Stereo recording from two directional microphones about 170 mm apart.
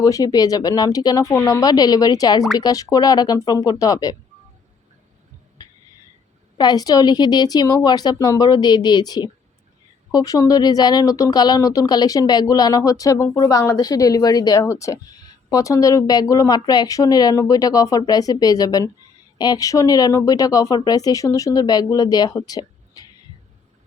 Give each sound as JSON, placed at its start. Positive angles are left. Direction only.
{"t": 0.0, "sound": "speech", "side_deg": 20}
{"t": 5.6, "sound": "a sound", "side_deg": 20}
{"t": 6.6, "sound": "speech", "side_deg": 25}